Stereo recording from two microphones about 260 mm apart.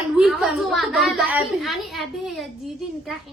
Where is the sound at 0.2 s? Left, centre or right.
Centre.